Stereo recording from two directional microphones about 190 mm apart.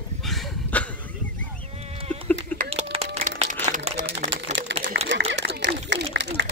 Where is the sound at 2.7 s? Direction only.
30° right (ahead or behind).